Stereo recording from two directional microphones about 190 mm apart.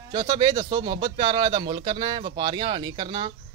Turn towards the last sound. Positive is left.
turn(degrees=-25)  # may be behind; listen again after turning